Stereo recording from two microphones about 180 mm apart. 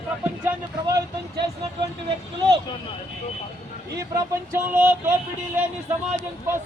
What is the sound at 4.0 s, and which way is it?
Speech, 15° right (ahead or behind).